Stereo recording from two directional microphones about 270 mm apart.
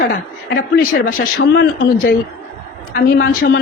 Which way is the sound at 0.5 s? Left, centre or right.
Left.